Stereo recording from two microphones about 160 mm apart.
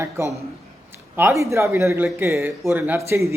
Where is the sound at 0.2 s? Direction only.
20° right (ahead or behind).